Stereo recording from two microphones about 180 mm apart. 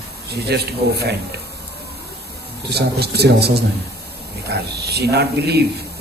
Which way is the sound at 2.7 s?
65° right (ahead or behind).